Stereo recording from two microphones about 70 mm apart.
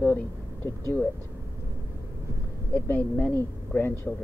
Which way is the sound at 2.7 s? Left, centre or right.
Left.